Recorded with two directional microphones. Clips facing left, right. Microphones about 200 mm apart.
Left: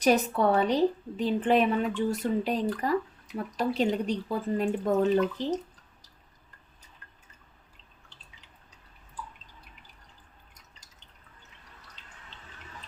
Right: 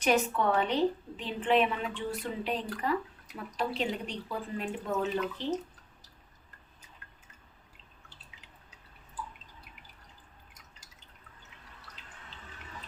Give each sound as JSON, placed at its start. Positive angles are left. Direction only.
{"t": 0.0, "sound": "a woman's voice", "side_deg": 40}